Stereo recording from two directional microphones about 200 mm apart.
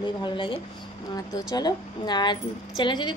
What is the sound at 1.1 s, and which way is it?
Speech, 20° left (ahead or behind).